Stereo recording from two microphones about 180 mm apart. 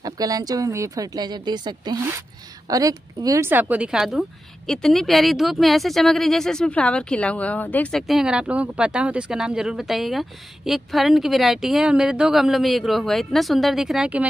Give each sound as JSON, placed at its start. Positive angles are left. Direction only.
{"t": 0.0, "sound": "a woman's voice", "side_deg": -20}